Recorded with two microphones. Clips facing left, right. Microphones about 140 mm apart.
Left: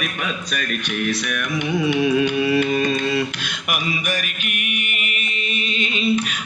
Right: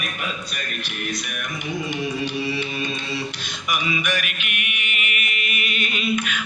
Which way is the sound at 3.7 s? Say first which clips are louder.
Even; 45° left (ahead or behind).